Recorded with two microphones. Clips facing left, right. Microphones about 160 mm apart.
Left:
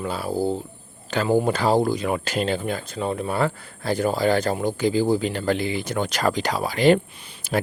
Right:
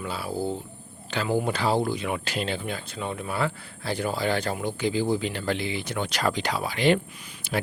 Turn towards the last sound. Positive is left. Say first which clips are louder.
# left 4 dB
turn(degrees=45)  # may be behind; listen again after turning